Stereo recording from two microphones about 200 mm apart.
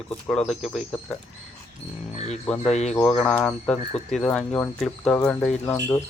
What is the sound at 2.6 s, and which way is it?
Speech, 35° left (ahead or behind).